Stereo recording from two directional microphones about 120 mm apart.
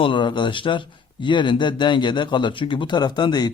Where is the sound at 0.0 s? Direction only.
45° left (ahead or behind).